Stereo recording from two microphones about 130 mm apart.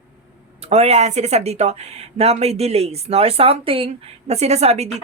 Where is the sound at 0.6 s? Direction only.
55° right (ahead or behind).